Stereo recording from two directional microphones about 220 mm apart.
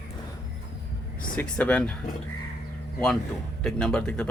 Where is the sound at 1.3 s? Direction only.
5° left (ahead or behind).